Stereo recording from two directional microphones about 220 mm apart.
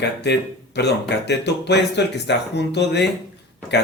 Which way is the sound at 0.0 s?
50° left (ahead or behind).